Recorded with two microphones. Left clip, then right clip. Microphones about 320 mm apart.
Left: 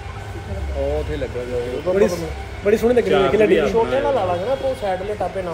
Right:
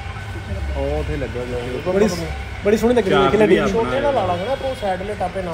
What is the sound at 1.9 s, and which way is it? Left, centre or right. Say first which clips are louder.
Speech: left 1 dB; centre.